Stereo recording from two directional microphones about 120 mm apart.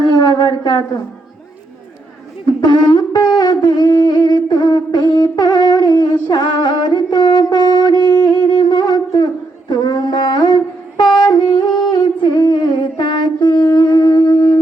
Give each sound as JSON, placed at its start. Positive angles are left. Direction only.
{"t": 0.0, "sound": "a sound", "side_deg": 35}
{"t": 2.5, "sound": "wind instrument", "side_deg": 35}
{"t": 11.9, "sound": "humming", "side_deg": 35}